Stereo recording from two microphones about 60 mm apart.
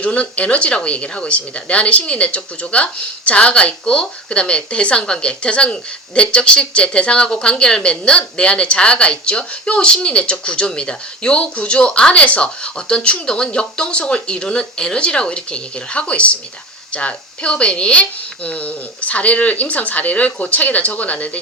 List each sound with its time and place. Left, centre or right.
0.0 s speech: left